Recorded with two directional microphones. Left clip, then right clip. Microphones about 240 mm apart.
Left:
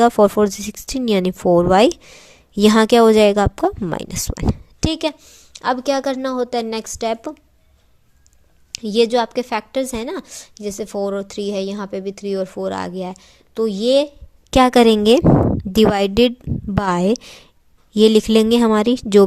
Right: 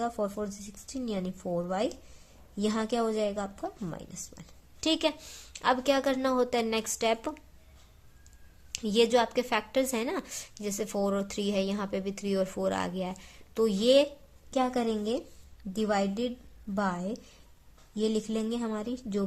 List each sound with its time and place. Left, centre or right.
0.0 s a woman's voice: left
5.2 s a woman's voice: centre
8.7 s a woman's voice: left
14.5 s a woman's voice: left